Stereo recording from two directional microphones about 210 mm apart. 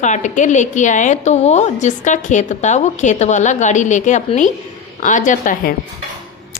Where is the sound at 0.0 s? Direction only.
35° left (ahead or behind).